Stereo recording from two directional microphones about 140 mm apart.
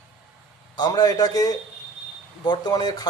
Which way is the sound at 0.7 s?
30° left (ahead or behind).